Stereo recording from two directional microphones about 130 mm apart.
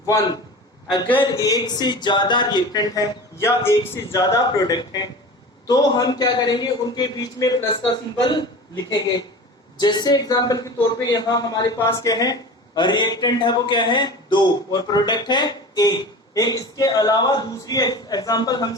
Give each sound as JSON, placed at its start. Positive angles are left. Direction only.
{"t": 1.2, "sound": "a man's voice", "side_deg": 30}